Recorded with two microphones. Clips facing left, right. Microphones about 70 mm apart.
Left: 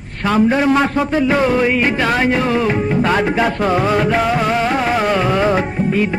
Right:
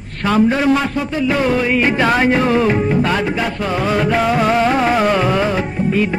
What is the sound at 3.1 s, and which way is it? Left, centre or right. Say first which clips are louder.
Music: left 3 dB; left.